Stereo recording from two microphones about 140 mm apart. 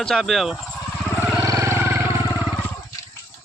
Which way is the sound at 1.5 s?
20° right (ahead or behind).